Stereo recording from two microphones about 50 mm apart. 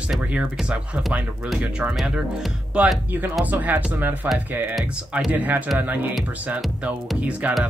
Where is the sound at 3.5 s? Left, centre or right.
Right.